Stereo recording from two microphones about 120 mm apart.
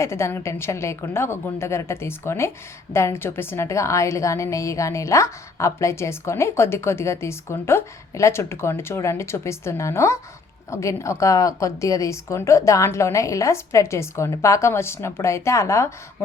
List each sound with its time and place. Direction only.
0.0 s a woman's voice: 20° left (ahead or behind)